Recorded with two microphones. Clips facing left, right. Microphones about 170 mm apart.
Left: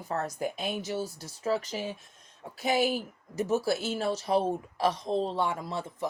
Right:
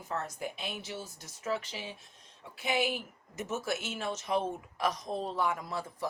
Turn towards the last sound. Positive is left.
turn(degrees=25)  # may be behind; listen again after turning